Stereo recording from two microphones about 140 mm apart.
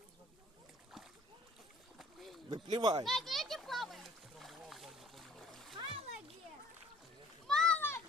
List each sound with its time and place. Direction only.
2.0 s rowboat: centre (ahead or behind)
2.6 s speech: 30° right (ahead or behind)
3.0 s boat: centre (ahead or behind)
5.7 s splash: 35° right (ahead or behind)
7.4 s a sound: 5° left (ahead or behind)
7.8 s children playing: 15° left (ahead or behind)